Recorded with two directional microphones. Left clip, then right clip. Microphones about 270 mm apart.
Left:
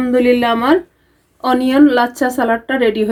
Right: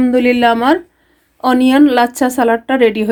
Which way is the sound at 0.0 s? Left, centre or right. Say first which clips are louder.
Right 2 dB; right.